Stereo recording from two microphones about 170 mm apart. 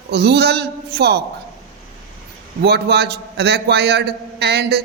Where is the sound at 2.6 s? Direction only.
75° right (ahead or behind).